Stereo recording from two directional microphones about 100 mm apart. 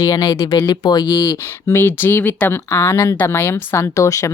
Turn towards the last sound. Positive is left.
turn(degrees=30)  # may be behind; listen again after turning